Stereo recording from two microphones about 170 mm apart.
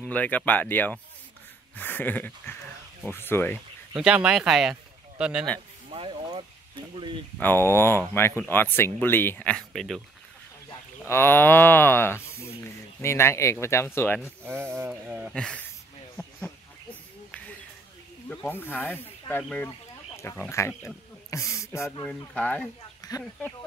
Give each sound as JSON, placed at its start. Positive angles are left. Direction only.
{"t": 0.0, "sound": "speech", "side_deg": 10}
{"t": 3.9, "sound": "speech", "side_deg": -5}
{"t": 5.9, "sound": "a sound", "side_deg": -35}
{"t": 7.0, "sound": "speech", "side_deg": -30}
{"t": 7.3, "sound": "speech", "side_deg": 10}
{"t": 10.7, "sound": "moo", "side_deg": 15}
{"t": 13.0, "sound": "speech", "side_deg": 15}
{"t": 14.4, "sound": "a sound", "side_deg": -15}
{"t": 15.3, "sound": "speech", "side_deg": 5}
{"t": 16.2, "sound": "a sound", "side_deg": 10}
{"t": 18.3, "sound": "speech", "side_deg": 10}